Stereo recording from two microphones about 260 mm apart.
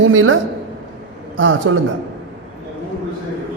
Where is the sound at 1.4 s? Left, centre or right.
Right.